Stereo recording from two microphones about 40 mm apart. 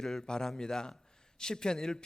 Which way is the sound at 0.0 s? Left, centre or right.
Centre.